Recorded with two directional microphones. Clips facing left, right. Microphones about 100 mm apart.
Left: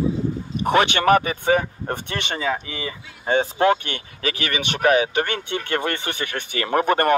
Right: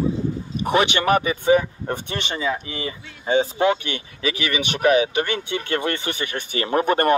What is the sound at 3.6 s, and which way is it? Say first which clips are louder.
Speech: left 1 dB; 45° left (ahead or behind).